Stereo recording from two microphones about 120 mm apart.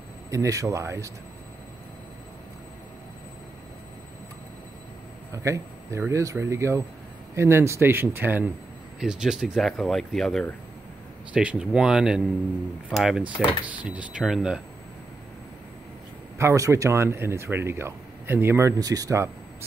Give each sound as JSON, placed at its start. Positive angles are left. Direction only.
{"t": 0.3, "sound": "speech", "side_deg": -25}
{"t": 5.3, "sound": "speech", "side_deg": -25}
{"t": 9.0, "sound": "speech", "side_deg": -5}
{"t": 11.3, "sound": "speech", "side_deg": -10}
{"t": 16.3, "sound": "speech", "side_deg": -25}